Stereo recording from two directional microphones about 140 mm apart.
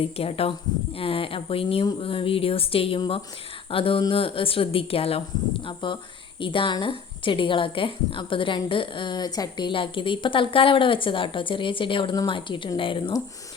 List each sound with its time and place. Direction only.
0.0 s a woman's voice: 45° left (ahead or behind)